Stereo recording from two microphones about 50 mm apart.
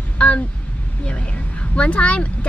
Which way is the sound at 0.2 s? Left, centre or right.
Left.